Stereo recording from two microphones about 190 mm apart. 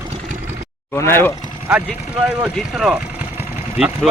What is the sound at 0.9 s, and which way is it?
Speech, 15° left (ahead or behind).